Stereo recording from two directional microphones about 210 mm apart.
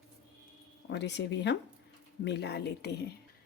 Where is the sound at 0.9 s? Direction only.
55° left (ahead or behind).